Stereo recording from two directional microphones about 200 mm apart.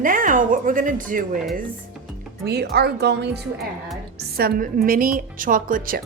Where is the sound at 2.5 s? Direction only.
55° right (ahead or behind).